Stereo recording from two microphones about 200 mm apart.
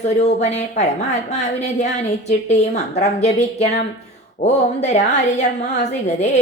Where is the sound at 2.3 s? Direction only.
35° left (ahead or behind).